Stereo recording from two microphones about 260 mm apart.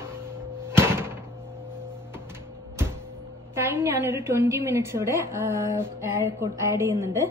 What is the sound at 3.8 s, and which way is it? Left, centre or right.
A woman's voice, centre.